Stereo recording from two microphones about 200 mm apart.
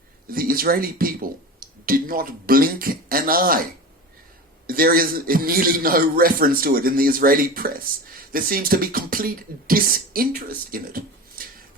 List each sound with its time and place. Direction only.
0.3 s speech: 45° right (ahead or behind)
4.6 s a man's voice: 45° right (ahead or behind)